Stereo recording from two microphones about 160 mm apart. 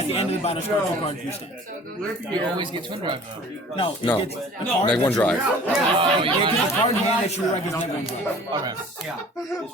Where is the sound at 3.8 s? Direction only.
30° left (ahead or behind).